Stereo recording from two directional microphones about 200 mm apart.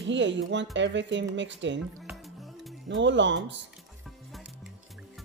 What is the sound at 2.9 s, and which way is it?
Speech, 65° right (ahead or behind).